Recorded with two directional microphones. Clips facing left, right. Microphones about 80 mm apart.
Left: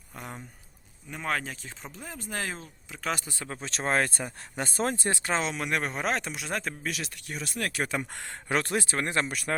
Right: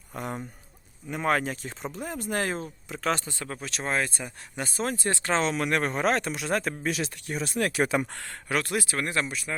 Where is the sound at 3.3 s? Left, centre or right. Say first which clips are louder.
Right 2 dB; centre.